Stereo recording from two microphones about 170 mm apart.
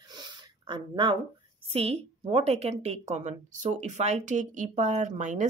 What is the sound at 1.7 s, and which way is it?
A woman's voice, 35° right (ahead or behind).